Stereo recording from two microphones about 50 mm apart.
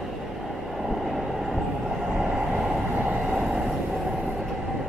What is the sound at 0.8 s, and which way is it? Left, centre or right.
Train, centre.